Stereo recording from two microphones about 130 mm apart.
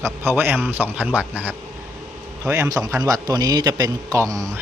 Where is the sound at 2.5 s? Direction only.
25° right (ahead or behind).